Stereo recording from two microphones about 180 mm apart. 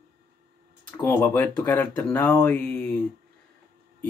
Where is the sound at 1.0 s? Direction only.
10° left (ahead or behind).